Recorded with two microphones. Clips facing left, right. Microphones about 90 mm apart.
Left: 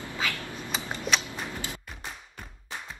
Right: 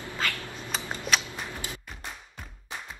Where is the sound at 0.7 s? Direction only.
Centre (ahead or behind).